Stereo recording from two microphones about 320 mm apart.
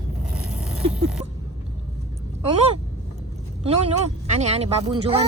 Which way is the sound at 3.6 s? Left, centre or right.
Centre.